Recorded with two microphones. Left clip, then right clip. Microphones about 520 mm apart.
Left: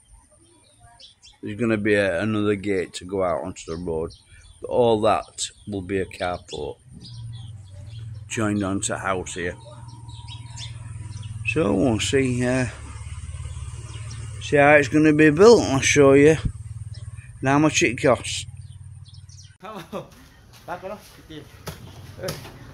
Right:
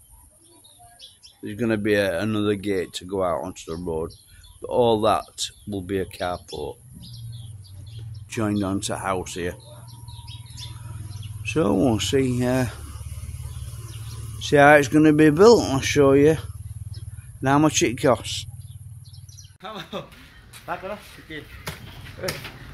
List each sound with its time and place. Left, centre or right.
1.4 s speech: right
8.3 s speech: right
11.4 s speech: right
14.4 s speech: right
19.6 s speech: centre
20.6 s speech: centre